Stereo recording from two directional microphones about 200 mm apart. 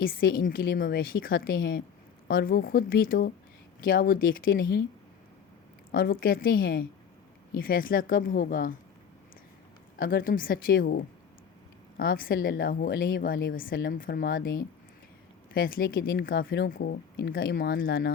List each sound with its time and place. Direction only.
0.0 s speech: 45° left (ahead or behind)
5.9 s speech: 50° left (ahead or behind)
10.0 s speech: 45° left (ahead or behind)